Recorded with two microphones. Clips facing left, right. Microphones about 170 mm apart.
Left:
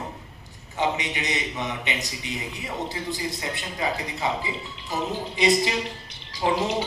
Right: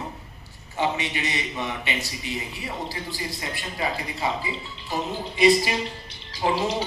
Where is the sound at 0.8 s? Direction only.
20° left (ahead or behind).